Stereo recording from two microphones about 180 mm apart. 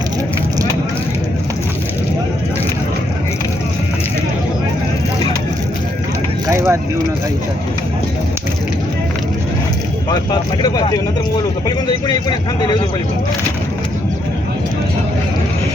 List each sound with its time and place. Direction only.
6.5 s vehicle: 15° right (ahead or behind)